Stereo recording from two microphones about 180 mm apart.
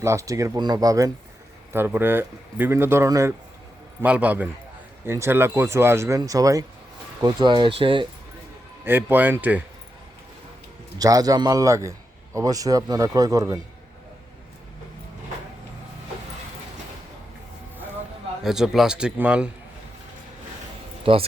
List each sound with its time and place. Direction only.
0.0 s a man's voice: 15° right (ahead or behind)
8.8 s speech: 10° right (ahead or behind)
10.9 s a man's voice: 20° right (ahead or behind)
18.4 s speech: 5° right (ahead or behind)
21.0 s speech: 30° right (ahead or behind)